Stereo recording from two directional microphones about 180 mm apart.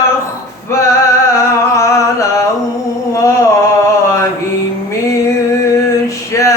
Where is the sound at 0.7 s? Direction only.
15° left (ahead or behind).